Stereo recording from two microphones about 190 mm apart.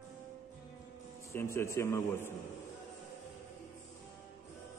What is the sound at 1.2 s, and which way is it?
A man's voice, 15° left (ahead or behind).